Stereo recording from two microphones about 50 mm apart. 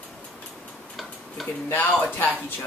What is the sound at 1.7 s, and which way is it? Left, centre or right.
Speech, left.